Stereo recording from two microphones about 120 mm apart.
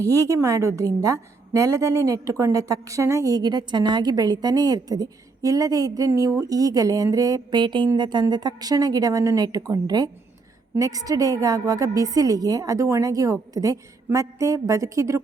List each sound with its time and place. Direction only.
0.1 s a woman's voice: 25° right (ahead or behind)